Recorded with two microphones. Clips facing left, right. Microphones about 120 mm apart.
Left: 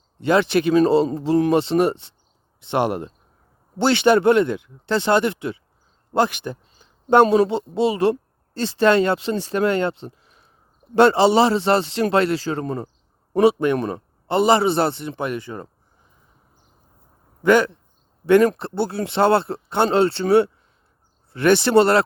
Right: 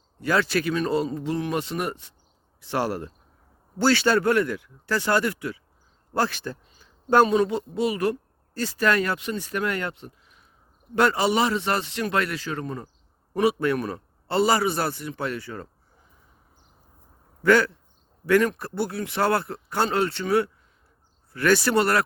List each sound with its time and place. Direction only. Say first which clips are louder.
0.2 s a man's voice: left 6 dB; 25° left (ahead or behind)
17.4 s a man's voice: left 3 dB; 20° left (ahead or behind)